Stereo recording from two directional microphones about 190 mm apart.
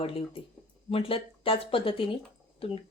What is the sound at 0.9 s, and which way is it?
Speech, 30° left (ahead or behind).